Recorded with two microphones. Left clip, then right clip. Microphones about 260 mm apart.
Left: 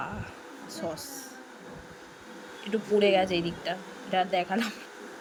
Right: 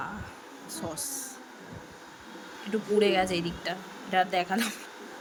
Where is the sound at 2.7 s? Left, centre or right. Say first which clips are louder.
Left 1 dB; centre.